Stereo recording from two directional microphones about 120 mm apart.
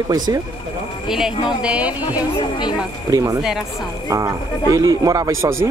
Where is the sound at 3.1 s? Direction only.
30° right (ahead or behind).